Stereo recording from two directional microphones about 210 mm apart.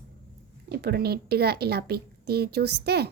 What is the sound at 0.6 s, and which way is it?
Speech, 50° right (ahead or behind).